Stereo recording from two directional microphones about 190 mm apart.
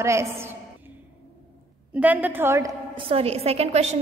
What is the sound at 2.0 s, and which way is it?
Speech, 10° right (ahead or behind).